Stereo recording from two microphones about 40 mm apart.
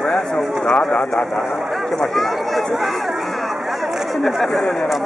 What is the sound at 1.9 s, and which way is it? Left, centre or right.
Speech, centre.